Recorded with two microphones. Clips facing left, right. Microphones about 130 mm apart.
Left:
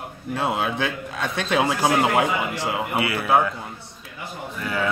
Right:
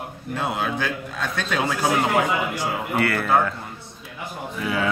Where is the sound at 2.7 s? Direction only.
5° left (ahead or behind).